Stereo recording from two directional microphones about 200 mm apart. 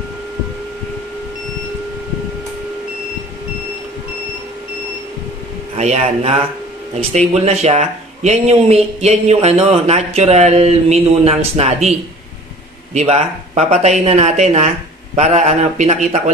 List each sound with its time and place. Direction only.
5.8 s speech: 35° right (ahead or behind)
12.9 s speech: 35° right (ahead or behind)